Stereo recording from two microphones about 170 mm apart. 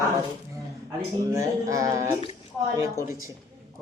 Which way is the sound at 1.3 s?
20° right (ahead or behind).